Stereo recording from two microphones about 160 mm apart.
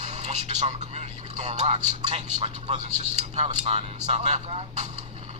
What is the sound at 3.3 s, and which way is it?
Speech, 40° right (ahead or behind).